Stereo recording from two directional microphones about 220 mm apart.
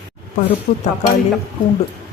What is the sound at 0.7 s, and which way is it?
Speech, 35° left (ahead or behind).